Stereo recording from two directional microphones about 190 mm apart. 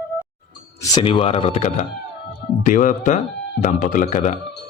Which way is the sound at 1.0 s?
30° left (ahead or behind).